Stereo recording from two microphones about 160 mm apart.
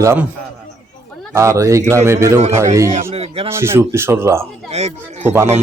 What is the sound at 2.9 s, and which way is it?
Speech, 40° right (ahead or behind).